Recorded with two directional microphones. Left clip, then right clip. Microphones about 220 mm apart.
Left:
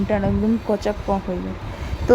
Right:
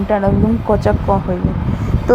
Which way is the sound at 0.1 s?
Centre (ahead or behind).